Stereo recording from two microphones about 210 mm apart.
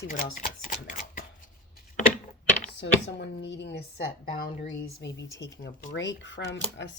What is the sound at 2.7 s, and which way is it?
A woman's voice, 55° left (ahead or behind).